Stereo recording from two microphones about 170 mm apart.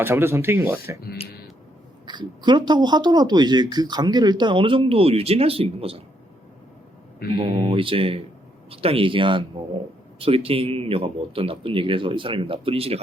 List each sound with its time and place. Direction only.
0.0 s speech: 15° right (ahead or behind)
2.0 s speech: 25° right (ahead or behind)
7.3 s speech: 35° right (ahead or behind)